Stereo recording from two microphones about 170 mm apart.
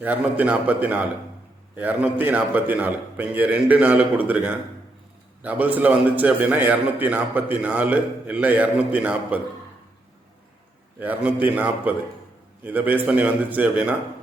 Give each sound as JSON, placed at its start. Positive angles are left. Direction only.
{"t": 0.0, "sound": "a man's voice", "side_deg": -10}
{"t": 11.0, "sound": "a man's voice", "side_deg": -10}